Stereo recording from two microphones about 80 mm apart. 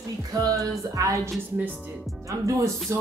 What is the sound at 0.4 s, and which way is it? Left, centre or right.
A man's voice, right.